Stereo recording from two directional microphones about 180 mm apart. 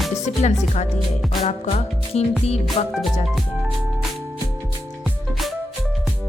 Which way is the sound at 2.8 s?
40° left (ahead or behind).